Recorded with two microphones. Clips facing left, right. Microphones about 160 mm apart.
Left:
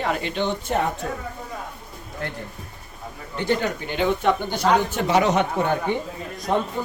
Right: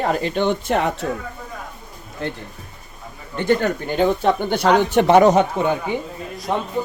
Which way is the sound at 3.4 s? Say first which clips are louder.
Right 5 dB; 50° right (ahead or behind).